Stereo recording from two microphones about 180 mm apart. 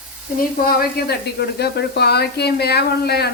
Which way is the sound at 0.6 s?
60° left (ahead or behind).